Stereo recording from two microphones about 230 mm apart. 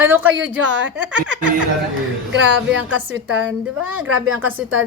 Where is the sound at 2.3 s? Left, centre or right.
Right.